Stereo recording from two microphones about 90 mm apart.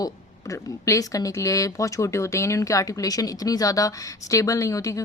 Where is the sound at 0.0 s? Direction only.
35° left (ahead or behind).